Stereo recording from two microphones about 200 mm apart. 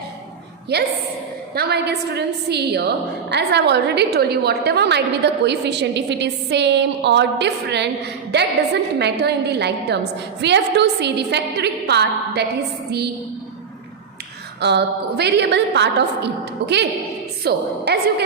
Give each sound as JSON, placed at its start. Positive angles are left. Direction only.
{"t": 0.7, "sound": "a woman's voice", "side_deg": -55}
{"t": 14.6, "sound": "a woman's voice", "side_deg": -55}